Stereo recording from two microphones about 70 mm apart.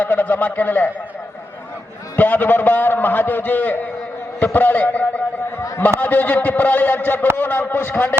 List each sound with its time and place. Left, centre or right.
0.0 s a man's voice: left
2.1 s a man's voice: left